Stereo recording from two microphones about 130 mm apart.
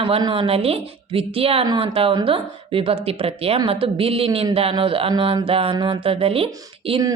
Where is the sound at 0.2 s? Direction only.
40° right (ahead or behind).